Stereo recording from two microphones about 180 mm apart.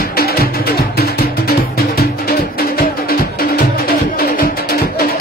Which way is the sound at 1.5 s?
60° left (ahead or behind).